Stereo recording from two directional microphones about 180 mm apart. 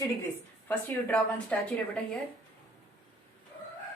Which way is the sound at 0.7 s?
10° left (ahead or behind).